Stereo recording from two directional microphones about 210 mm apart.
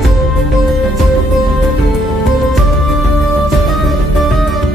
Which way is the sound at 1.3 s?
Centre (ahead or behind).